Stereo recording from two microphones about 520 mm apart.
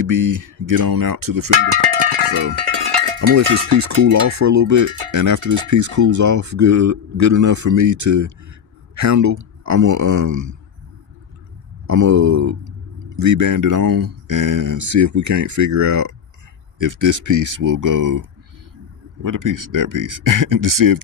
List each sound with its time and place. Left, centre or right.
0.0 s cowbell: right
1.8 s cowbell: right
3.2 s cowbell: right
11.9 s cowbell: right